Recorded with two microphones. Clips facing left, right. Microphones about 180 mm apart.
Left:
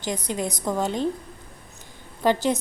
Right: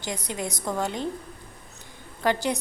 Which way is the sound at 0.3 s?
20° left (ahead or behind).